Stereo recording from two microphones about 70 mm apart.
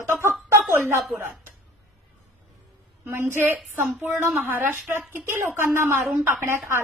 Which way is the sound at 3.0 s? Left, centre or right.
Right.